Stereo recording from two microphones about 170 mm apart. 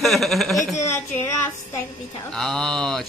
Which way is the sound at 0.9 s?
15° left (ahead or behind).